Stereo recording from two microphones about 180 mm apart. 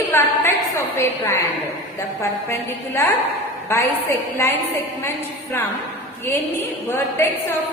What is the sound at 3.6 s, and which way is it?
Speech, 15° left (ahead or behind).